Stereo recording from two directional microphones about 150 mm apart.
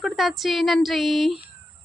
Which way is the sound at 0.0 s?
Centre (ahead or behind).